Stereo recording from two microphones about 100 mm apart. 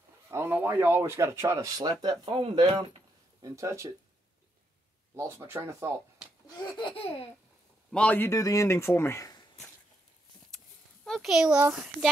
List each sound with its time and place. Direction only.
0.3 s a man's voice: 25° right (ahead or behind)
1.8 s speech: 45° right (ahead or behind)
2.2 s speech: 70° right (ahead or behind); by 2.9 s 50° right (ahead or behind)
3.4 s speech: 30° right (ahead or behind)
5.1 s a man's voice: 30° right (ahead or behind)
6.8 s laughter: 65° left (ahead or behind)
7.9 s a man's voice: 15° left (ahead or behind)
8.3 s speech: 35° left (ahead or behind)
11.1 s a child's voice: centre (ahead or behind)